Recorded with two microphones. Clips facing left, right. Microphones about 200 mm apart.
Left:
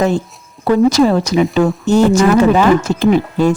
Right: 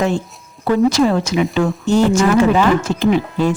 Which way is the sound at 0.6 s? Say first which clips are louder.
Left 3 dB; 40° left (ahead or behind).